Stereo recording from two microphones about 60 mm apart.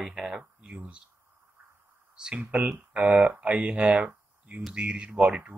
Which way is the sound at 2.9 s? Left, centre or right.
Right.